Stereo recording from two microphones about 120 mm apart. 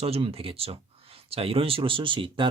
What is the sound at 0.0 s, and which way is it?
Speech, 55° right (ahead or behind).